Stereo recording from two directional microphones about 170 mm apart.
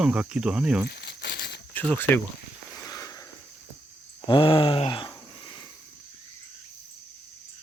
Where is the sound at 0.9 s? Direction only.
75° left (ahead or behind).